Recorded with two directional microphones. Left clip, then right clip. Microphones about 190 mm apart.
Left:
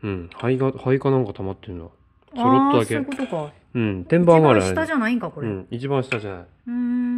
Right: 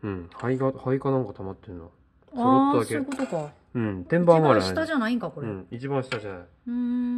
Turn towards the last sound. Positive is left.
turn(degrees=0)  # may be behind; listen again after turning